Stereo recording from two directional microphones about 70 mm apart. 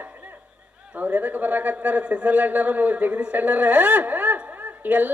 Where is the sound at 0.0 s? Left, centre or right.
Right.